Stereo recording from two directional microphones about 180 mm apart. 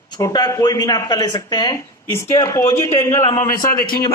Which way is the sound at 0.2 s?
20° left (ahead or behind).